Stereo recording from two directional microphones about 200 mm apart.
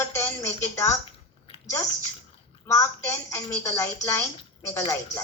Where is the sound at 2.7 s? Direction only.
10° left (ahead or behind).